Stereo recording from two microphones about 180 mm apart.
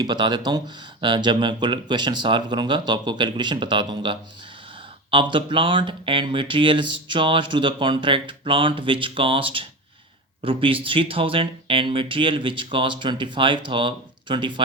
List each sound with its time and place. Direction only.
0.0 s speech: 25° right (ahead or behind)